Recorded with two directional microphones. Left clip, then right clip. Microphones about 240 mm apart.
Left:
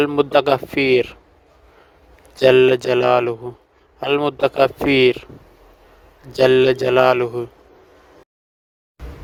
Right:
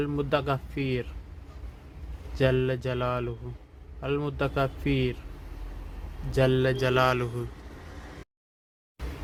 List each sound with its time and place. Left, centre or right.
0.0 s speech: left
2.4 s a man's voice: left
6.3 s speech: left